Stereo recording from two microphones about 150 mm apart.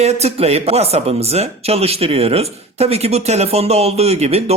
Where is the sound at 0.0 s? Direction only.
45° right (ahead or behind).